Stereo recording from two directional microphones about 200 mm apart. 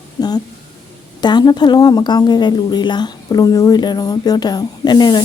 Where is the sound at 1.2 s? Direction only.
20° left (ahead or behind).